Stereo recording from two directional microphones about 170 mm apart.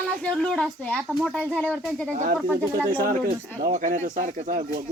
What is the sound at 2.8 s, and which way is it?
Speech, 55° right (ahead or behind).